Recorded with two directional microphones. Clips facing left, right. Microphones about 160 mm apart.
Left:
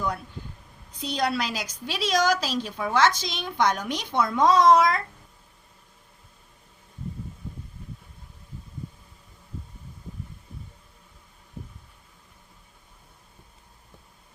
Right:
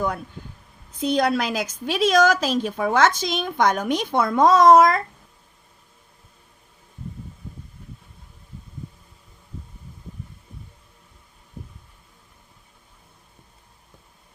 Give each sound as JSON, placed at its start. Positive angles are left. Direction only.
{"t": 0.9, "sound": "a woman's voice", "side_deg": -50}